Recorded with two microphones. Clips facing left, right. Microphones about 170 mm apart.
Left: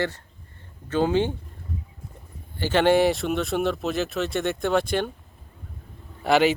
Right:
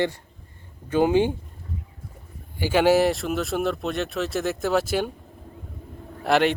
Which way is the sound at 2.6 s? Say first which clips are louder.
Even; 10° right (ahead or behind).